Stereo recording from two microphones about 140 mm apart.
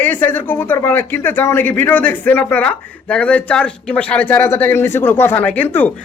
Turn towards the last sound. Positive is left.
turn(degrees=15)  # may be behind; listen again after turning